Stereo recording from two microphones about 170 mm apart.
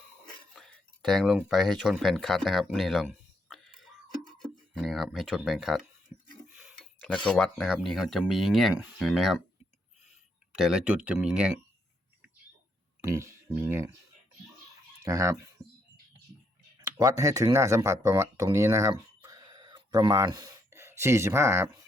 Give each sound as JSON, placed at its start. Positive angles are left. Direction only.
{"t": 0.5, "sound": "speech", "side_deg": 0}
{"t": 6.1, "sound": "a sound", "side_deg": -15}
{"t": 7.3, "sound": "speech", "side_deg": 5}
{"t": 10.5, "sound": "speech", "side_deg": 0}
{"t": 13.0, "sound": "speech", "side_deg": -15}
{"t": 15.0, "sound": "speech", "side_deg": -15}
{"t": 17.0, "sound": "speech", "side_deg": -20}